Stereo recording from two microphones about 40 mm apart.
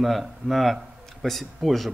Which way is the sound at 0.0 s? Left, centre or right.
Centre.